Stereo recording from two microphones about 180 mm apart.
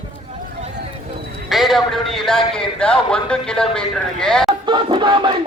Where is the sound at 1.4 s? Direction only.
Centre (ahead or behind).